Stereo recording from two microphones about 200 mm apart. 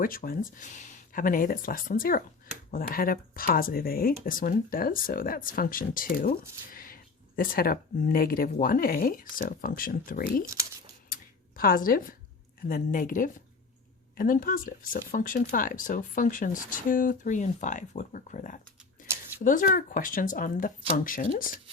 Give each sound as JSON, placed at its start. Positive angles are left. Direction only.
{"t": 0.0, "sound": "speech", "side_deg": 45}
{"t": 10.4, "sound": "speech", "side_deg": -15}
{"t": 11.1, "sound": "a sound", "side_deg": 45}
{"t": 12.6, "sound": "speech", "side_deg": 45}